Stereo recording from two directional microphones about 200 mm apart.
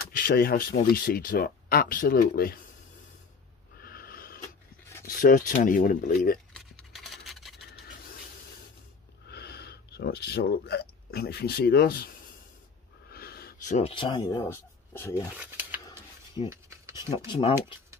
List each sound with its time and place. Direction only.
0.1 s speech: 45° left (ahead or behind)
3.7 s snort: 50° left (ahead or behind)
5.0 s speech: 45° left (ahead or behind)
6.9 s scratch: centre (ahead or behind)
9.3 s speech: 55° left (ahead or behind)
13.1 s a sound: 50° left (ahead or behind)
13.7 s speech: 25° left (ahead or behind)
15.3 s a sound: 10° right (ahead or behind)
17.3 s speech: 30° left (ahead or behind)